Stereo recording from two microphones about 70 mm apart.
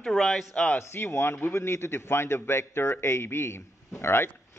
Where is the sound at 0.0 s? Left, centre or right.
Centre.